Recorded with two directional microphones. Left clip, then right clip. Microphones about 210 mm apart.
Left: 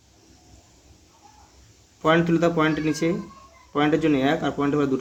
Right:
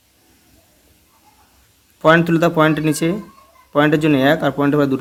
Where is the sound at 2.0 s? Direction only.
35° right (ahead or behind).